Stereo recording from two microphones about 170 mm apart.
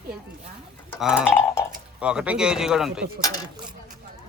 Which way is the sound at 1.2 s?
10° left (ahead or behind).